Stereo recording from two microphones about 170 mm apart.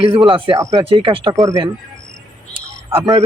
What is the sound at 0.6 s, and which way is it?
Speech, 20° right (ahead or behind).